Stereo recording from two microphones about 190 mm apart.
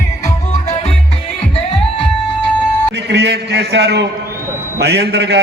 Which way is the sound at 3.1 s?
60° right (ahead or behind).